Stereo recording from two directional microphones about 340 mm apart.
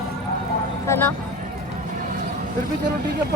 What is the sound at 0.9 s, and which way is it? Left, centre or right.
Speech, centre.